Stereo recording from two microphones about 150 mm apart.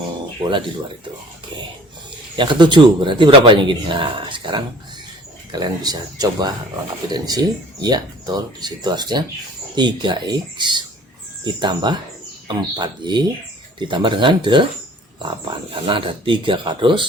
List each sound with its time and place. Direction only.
2.3 s speech: 30° right (ahead or behind)